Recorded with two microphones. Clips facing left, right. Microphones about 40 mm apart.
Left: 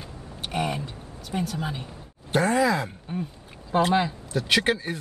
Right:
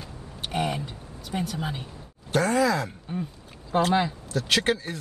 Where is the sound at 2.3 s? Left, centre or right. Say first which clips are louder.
Left 1 dB; centre.